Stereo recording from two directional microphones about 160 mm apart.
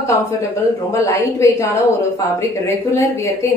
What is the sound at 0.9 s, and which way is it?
Speech, 20° left (ahead or behind).